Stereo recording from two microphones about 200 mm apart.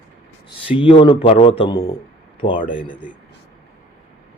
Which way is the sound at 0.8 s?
25° left (ahead or behind).